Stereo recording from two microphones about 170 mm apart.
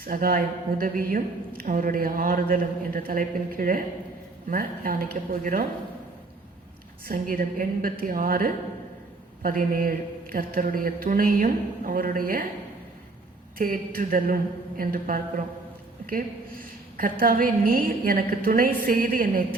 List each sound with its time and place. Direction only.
0.0 s speech: 55° right (ahead or behind)
7.0 s speech: 55° right (ahead or behind)
13.6 s speech: 55° right (ahead or behind)